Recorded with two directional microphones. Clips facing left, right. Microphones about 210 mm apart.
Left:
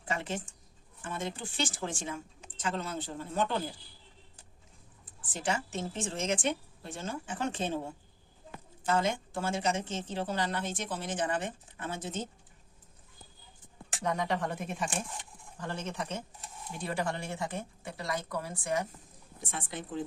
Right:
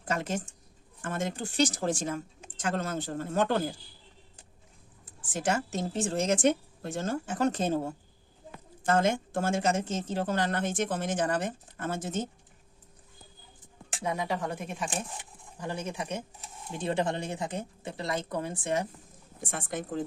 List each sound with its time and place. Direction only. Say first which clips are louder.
0.0 s speech: right 4 dB; 40° right (ahead or behind)
5.4 s speech: right 4 dB; 45° right (ahead or behind)
14.0 s speech: even; 10° right (ahead or behind)
15.5 s speech: right 2 dB; 10° right (ahead or behind)
16.7 s speech: right 5 dB; 20° right (ahead or behind)
19.6 s speech: right 7 dB; 45° right (ahead or behind)